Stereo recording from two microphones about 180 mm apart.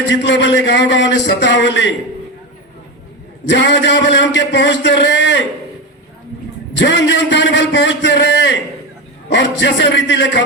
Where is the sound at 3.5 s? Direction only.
80° left.